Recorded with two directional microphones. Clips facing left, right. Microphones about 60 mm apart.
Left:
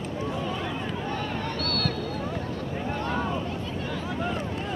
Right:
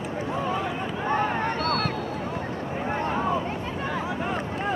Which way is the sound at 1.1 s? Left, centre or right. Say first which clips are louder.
Right 10 dB; right.